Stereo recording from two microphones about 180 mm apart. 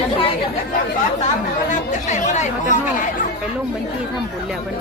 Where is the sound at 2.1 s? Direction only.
40° left (ahead or behind).